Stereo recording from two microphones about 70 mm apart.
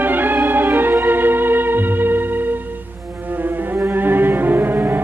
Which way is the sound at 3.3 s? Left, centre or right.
Right.